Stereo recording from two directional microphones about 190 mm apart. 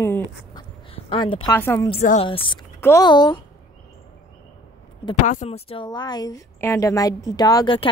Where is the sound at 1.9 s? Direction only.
35° left (ahead or behind).